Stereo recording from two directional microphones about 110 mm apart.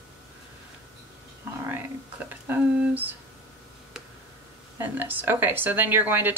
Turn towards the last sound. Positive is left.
turn(degrees=-20)  # may be behind; listen again after turning